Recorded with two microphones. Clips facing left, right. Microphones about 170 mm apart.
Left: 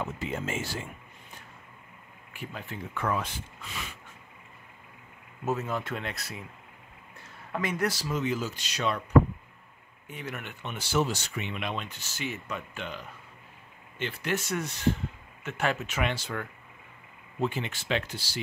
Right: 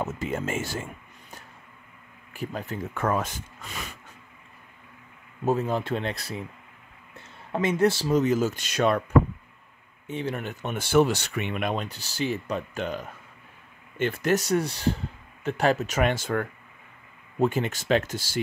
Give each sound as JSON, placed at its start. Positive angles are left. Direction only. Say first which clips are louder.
{"t": 0.0, "sound": "speech", "louder": "right 4 dB", "side_deg": -45}
{"t": 2.3, "sound": "speech", "louder": "right 7 dB", "side_deg": -40}
{"t": 5.4, "sound": "speech", "louder": "right 6 dB", "side_deg": -30}
{"t": 8.2, "sound": "speech", "louder": "right 6 dB", "side_deg": -45}
{"t": 10.0, "sound": "speech", "louder": "right 8 dB", "side_deg": -30}